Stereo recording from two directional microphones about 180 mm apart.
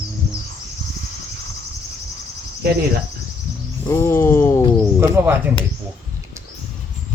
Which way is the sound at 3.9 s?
15° left (ahead or behind).